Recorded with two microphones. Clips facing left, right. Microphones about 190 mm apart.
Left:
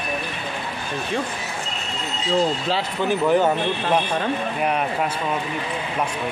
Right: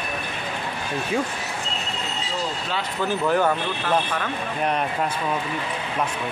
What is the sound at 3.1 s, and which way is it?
Speech, 20° left (ahead or behind).